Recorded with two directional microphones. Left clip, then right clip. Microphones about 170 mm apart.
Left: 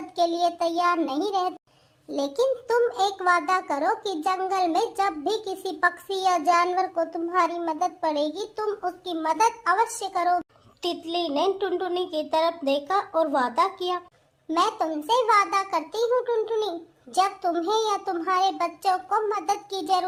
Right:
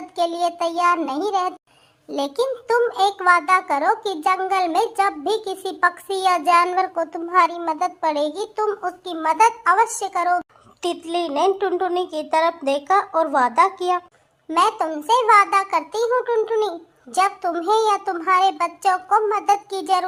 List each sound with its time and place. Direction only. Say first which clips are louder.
0.2 s a child's voice: right 2 dB; 20° right (ahead or behind)